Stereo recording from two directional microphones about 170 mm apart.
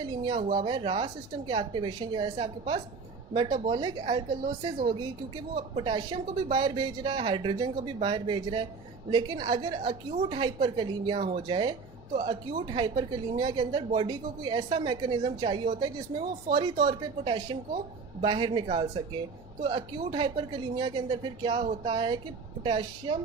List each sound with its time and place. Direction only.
0.0 s speech: 25° right (ahead or behind)
5.7 s speech: 30° right (ahead or behind)